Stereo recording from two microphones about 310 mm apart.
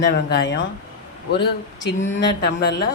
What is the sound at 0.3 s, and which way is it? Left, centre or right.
Speech, left.